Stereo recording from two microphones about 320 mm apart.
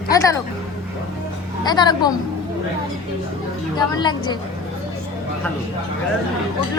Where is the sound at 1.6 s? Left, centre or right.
Centre.